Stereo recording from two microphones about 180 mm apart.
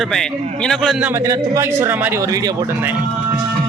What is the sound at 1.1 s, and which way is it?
A man's voice, 15° right (ahead or behind).